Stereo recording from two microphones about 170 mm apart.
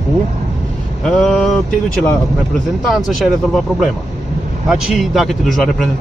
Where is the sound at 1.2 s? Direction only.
Centre (ahead or behind).